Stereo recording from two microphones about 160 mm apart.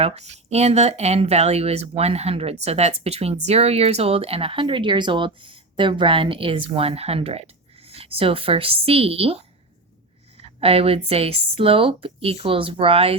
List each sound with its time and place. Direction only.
0.2 s speech: 45° right (ahead or behind)
10.6 s speech: 35° right (ahead or behind)